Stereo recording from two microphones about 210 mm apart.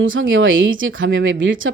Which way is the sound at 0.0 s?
65° right (ahead or behind).